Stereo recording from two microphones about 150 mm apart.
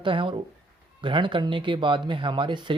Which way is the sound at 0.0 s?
35° right (ahead or behind).